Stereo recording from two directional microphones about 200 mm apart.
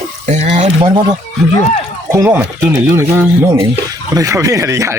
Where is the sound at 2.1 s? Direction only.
10° right (ahead or behind).